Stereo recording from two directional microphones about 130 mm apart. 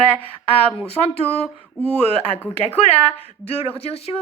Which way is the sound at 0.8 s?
50° left (ahead or behind).